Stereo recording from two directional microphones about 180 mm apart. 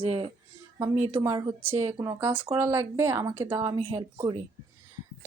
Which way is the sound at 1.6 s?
10° right (ahead or behind).